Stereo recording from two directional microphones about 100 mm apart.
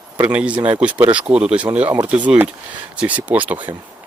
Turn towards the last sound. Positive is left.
turn(degrees=-15)  # may be behind; listen again after turning